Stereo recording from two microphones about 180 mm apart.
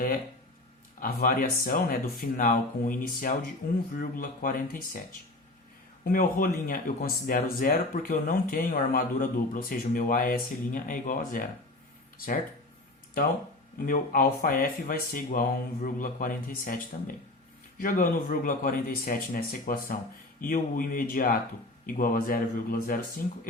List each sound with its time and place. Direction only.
0.9 s speech: 55° left (ahead or behind)
6.1 s speech: 50° left (ahead or behind)
13.7 s speech: 50° left (ahead or behind)